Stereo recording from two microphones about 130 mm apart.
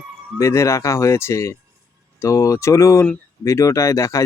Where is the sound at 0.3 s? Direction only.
20° left (ahead or behind).